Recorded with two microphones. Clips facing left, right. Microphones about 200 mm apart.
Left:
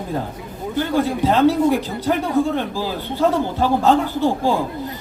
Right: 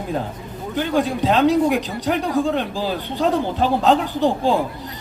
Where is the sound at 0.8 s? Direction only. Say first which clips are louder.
Left 1 dB; 15° right (ahead or behind).